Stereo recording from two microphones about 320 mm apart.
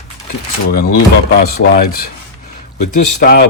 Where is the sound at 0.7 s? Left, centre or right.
Left.